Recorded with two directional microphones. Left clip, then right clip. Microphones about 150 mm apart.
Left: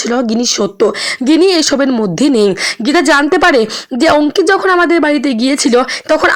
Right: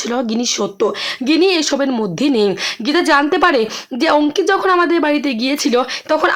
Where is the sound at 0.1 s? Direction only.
30° left (ahead or behind).